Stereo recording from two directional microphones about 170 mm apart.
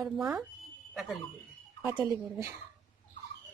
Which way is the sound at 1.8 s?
15° right (ahead or behind).